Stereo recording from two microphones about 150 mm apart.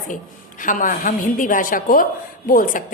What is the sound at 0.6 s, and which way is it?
A woman's voice, 60° left (ahead or behind).